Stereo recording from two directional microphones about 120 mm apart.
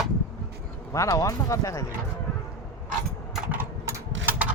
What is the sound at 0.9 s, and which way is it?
Speech, 25° left (ahead or behind).